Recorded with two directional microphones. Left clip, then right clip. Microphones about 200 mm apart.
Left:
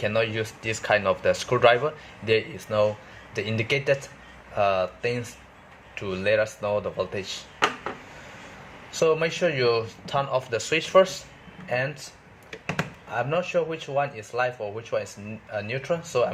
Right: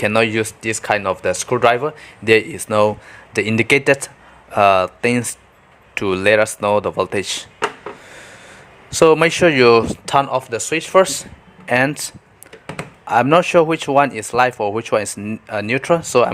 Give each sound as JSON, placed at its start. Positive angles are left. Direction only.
{"t": 0.0, "sound": "speech", "side_deg": -40}
{"t": 8.9, "sound": "speech", "side_deg": -50}
{"t": 11.6, "sound": "speech", "side_deg": -50}
{"t": 13.1, "sound": "speech", "side_deg": -50}